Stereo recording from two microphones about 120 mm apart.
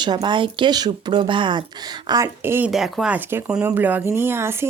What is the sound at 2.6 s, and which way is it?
Speech, 5° right (ahead or behind).